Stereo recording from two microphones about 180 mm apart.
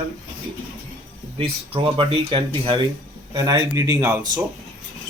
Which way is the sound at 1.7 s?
30° right (ahead or behind).